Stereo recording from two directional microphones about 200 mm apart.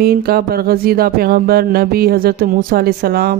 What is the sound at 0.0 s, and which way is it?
Speech, 50° right (ahead or behind).